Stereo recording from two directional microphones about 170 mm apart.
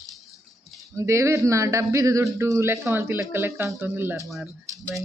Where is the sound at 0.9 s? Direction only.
15° right (ahead or behind).